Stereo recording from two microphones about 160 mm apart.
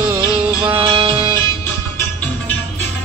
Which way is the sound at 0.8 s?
35° right (ahead or behind).